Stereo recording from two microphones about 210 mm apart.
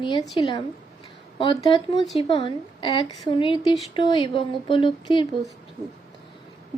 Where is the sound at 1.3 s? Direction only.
25° left (ahead or behind).